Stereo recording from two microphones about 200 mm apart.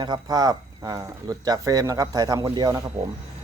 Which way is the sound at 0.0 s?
20° right (ahead or behind).